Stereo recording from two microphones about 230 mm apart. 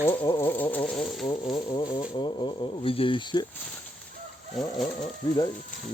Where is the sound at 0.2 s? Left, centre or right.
Centre.